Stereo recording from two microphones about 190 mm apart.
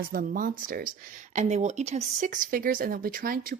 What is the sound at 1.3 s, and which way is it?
Speech, 40° right (ahead or behind).